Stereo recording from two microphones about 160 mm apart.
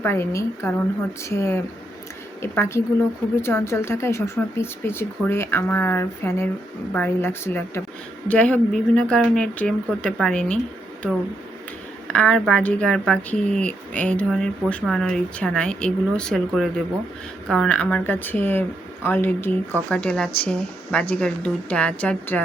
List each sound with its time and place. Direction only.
0.0 s speech: 15° left (ahead or behind)
12.1 s speech: 5° left (ahead or behind)